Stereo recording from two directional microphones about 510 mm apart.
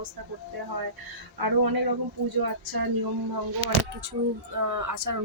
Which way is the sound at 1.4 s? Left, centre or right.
Right.